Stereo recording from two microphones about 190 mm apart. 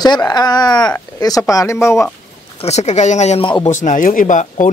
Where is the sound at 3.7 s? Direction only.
40° left (ahead or behind).